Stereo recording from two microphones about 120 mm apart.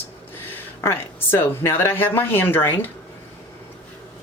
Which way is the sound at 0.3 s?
20° left (ahead or behind).